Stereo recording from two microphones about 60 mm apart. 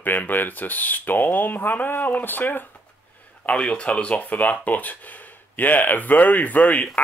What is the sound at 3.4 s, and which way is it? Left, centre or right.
Speech, centre.